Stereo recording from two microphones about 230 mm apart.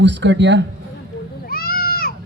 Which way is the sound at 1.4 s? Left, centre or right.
Left.